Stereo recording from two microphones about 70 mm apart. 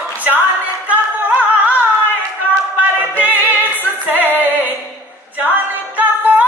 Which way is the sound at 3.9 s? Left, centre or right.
Right.